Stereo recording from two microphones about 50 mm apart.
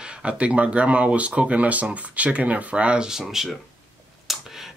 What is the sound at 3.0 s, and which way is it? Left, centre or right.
Speech, centre.